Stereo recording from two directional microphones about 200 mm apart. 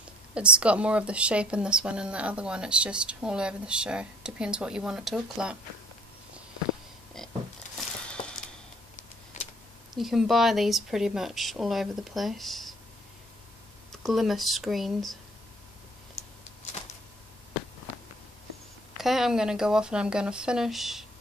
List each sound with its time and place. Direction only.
0.3 s speech: 5° right (ahead or behind)
7.2 s a sound: centre (ahead or behind)
9.3 s a sound: 35° left (ahead or behind)
9.9 s speech: centre (ahead or behind)
14.0 s speech: centre (ahead or behind)
18.9 s speech: centre (ahead or behind)